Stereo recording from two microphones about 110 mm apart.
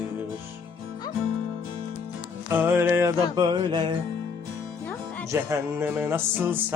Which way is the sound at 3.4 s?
40° right (ahead or behind).